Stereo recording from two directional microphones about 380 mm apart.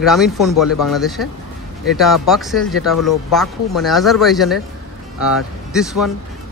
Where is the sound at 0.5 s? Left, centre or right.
Left.